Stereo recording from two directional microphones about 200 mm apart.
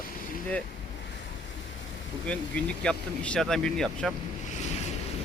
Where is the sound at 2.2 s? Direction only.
5° left (ahead or behind).